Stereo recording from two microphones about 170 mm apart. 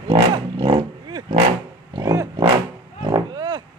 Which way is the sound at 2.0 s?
20° right (ahead or behind).